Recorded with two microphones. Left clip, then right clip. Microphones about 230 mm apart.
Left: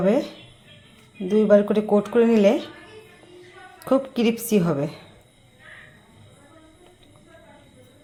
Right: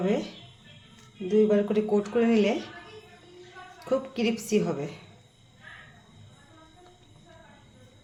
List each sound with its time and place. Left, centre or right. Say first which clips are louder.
0.0 s a woman's voice: left 7 dB; left
1.3 s a woman's voice: left 6 dB; left
3.8 s a woman's voice: left 6 dB; left